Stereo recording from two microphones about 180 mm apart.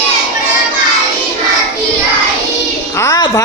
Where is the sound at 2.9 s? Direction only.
15° left (ahead or behind).